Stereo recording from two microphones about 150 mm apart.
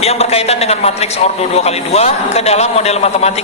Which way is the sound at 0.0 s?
45° left (ahead or behind).